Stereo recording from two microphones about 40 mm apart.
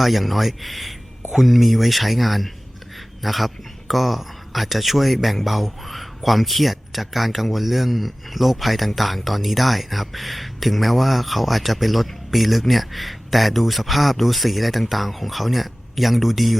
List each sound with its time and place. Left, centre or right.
0.0 s speech: centre